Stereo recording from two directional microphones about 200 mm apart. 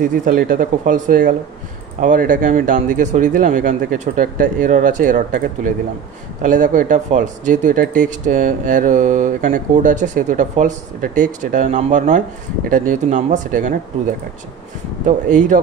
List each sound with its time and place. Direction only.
0.0 s speech: 45° right (ahead or behind)
15.0 s speech: 40° right (ahead or behind)